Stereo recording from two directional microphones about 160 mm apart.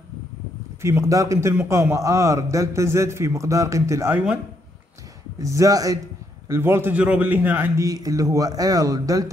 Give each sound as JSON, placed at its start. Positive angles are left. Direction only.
{"t": 0.8, "sound": "a man's voice", "side_deg": -20}
{"t": 5.4, "sound": "a man's voice", "side_deg": -20}